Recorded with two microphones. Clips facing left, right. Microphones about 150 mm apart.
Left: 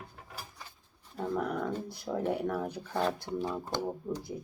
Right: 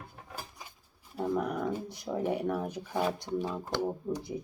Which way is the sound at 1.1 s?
10° right (ahead or behind).